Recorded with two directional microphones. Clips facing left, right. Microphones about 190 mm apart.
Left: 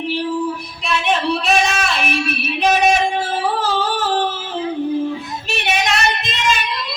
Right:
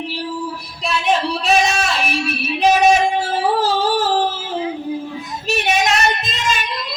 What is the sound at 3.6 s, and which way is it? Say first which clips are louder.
Singing: right 3 dB; 35° right (ahead or behind).